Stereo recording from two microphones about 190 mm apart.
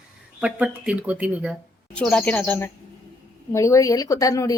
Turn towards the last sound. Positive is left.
turn(degrees=20)  # may be behind; listen again after turning